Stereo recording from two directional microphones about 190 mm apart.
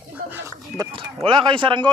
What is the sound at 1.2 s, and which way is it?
Speech, 25° right (ahead or behind).